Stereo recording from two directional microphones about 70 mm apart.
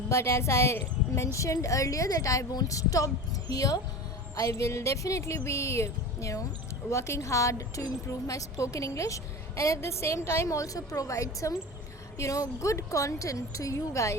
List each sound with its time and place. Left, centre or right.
0.1 s a woman's voice: left